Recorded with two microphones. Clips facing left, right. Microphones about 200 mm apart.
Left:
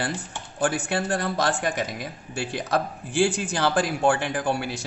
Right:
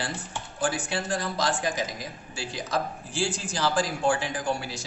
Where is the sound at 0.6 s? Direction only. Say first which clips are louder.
Left 4 dB; 60° left (ahead or behind).